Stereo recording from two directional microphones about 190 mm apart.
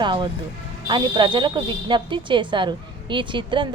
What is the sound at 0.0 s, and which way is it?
A woman's voice, 25° right (ahead or behind).